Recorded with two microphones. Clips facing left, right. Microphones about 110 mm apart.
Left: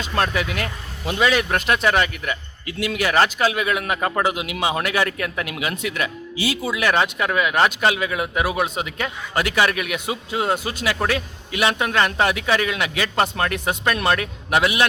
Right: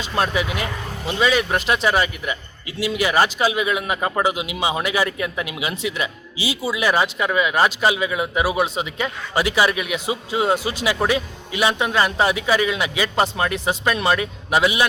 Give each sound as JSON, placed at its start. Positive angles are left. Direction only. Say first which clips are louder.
{"t": 0.1, "sound": "a man's voice", "louder": "right 1 dB", "side_deg": -5}
{"t": 5.7, "sound": "speech", "louder": "even", "side_deg": 50}
{"t": 6.6, "sound": "a man's voice", "louder": "right 1 dB", "side_deg": -5}